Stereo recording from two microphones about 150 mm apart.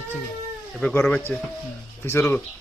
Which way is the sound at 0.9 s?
15° left (ahead or behind).